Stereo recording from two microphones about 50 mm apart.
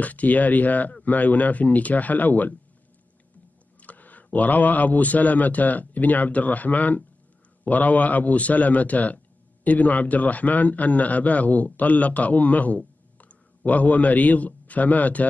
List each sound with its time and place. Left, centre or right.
0.0 s a man's voice: left
3.8 s a man's voice: left